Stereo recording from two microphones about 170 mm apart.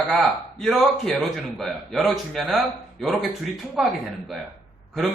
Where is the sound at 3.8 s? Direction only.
Centre (ahead or behind).